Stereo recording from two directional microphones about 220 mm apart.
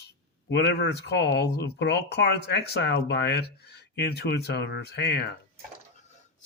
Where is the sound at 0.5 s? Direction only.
50° left (ahead or behind).